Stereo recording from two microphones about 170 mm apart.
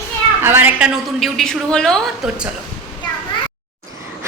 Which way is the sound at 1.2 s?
Centre (ahead or behind).